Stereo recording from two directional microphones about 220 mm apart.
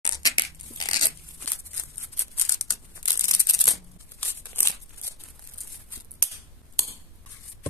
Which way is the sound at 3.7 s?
10° left (ahead or behind).